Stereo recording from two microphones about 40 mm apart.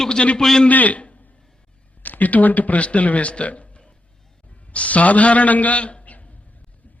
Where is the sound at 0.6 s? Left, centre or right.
Left.